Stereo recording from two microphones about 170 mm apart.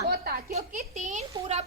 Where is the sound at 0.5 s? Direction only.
45° right (ahead or behind).